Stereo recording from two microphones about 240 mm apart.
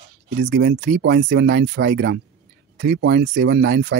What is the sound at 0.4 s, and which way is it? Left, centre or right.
Speech, right.